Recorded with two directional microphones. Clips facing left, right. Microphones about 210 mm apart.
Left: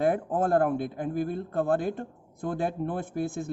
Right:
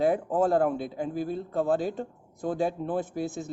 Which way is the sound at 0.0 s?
55° left (ahead or behind).